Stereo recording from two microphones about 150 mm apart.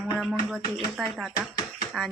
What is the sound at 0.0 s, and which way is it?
Speech, centre (ahead or behind).